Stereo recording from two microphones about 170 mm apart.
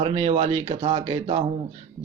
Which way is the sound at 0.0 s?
30° right (ahead or behind).